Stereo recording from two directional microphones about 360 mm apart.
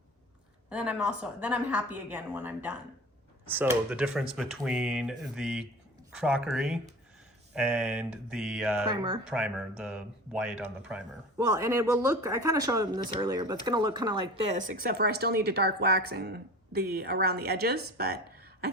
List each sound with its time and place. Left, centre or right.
0.7 s speech: centre; by 18.7 s right